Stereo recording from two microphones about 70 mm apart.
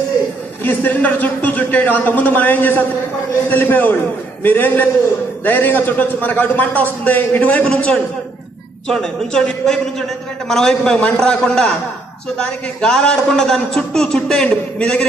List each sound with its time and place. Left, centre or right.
0.7 s a man's voice: left